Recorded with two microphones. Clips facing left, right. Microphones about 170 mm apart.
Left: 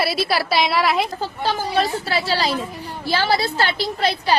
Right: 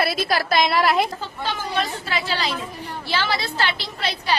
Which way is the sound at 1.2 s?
35° left (ahead or behind).